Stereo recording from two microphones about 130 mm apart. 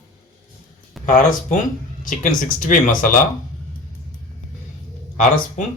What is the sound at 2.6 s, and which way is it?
Speech, 90° left.